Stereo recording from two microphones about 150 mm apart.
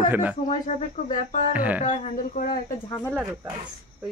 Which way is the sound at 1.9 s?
50° left (ahead or behind).